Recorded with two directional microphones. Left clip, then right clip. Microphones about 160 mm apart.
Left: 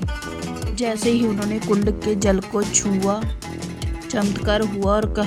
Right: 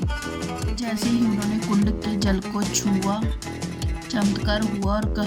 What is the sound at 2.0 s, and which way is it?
Speech, 25° left (ahead or behind).